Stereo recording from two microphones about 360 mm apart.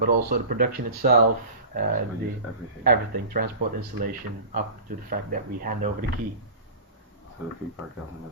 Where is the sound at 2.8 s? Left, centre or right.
Right.